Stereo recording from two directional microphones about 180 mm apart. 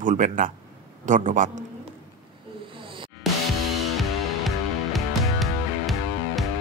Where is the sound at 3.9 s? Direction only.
Centre (ahead or behind).